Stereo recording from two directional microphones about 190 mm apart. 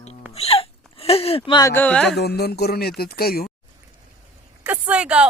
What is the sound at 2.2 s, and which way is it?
Speech, 60° left (ahead or behind).